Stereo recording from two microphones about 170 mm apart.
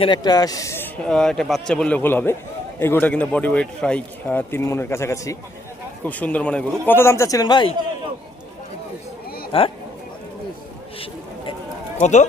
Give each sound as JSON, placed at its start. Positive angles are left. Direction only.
{"t": 0.0, "sound": "a man's voice", "side_deg": 25}
{"t": 9.5, "sound": "speech", "side_deg": 30}
{"t": 11.9, "sound": "speech", "side_deg": 45}